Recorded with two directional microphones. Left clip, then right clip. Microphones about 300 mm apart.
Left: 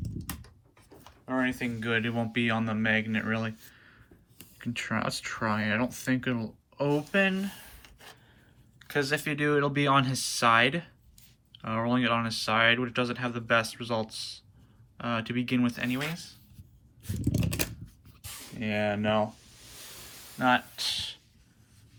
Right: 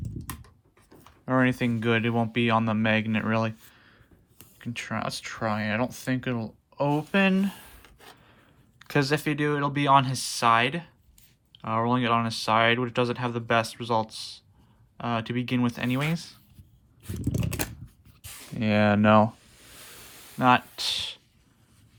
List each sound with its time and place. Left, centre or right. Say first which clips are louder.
1.3 s speech: right 6 dB; right
8.8 s speech: right 3 dB; centre
17.0 s a sound: even; centre
18.6 s speech: right 7 dB; centre
20.4 s speech: right 4 dB; centre